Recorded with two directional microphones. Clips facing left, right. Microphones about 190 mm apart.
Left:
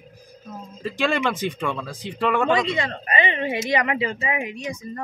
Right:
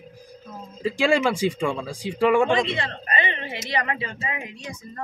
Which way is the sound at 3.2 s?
15° left (ahead or behind).